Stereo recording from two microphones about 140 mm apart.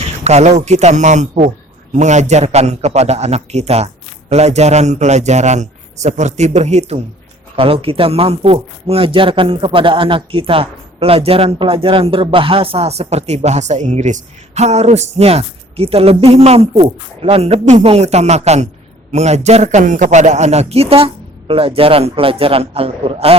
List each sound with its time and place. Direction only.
0.3 s a man's voice: 50° right (ahead or behind)
7.5 s a man's voice: 40° right (ahead or behind)